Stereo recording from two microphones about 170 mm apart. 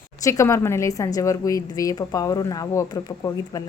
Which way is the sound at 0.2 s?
20° left (ahead or behind).